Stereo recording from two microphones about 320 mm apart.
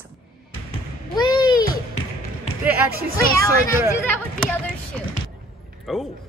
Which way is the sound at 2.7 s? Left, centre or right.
Centre.